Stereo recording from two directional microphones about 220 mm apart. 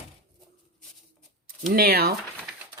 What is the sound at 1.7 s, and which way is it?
Speech, 45° right (ahead or behind).